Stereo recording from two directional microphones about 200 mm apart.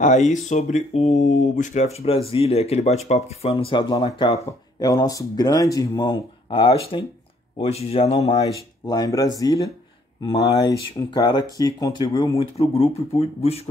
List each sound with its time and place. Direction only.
0.3 s speech: 35° left (ahead or behind)
8.8 s speech: 20° left (ahead or behind)